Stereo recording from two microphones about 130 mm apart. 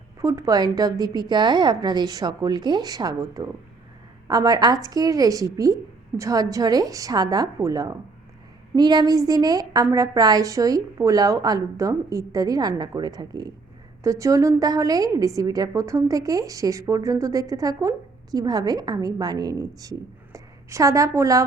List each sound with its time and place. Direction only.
0.2 s a woman's voice: 25° right (ahead or behind)